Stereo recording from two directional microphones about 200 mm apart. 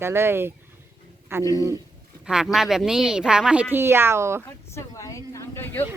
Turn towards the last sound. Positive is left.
turn(degrees=10)  # may be behind; listen again after turning